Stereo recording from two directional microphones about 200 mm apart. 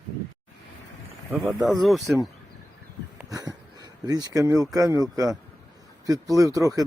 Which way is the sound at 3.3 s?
20° right (ahead or behind).